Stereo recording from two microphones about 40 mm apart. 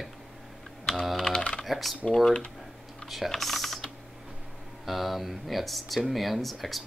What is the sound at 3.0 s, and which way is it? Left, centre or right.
Speech, centre.